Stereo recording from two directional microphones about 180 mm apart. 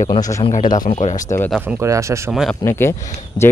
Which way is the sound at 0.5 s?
45° left (ahead or behind).